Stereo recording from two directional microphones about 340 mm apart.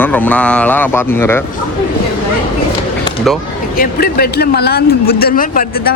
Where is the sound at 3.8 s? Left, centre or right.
Left.